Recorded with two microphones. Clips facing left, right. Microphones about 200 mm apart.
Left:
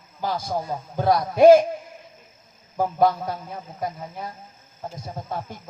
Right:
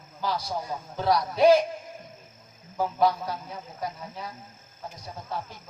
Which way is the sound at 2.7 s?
50° left (ahead or behind).